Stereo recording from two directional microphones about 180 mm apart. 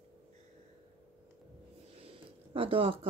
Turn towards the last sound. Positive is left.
turn(degrees=-30)  # may be behind; listen again after turning